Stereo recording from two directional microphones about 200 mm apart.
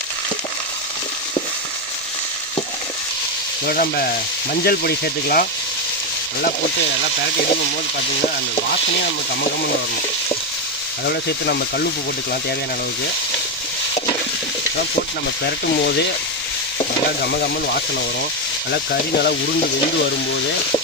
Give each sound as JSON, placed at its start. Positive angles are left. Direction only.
{"t": 3.7, "sound": "speech", "side_deg": 50}
{"t": 11.0, "sound": "speech", "side_deg": 55}
{"t": 15.4, "sound": "speech", "side_deg": 50}
{"t": 17.2, "sound": "speech", "side_deg": 50}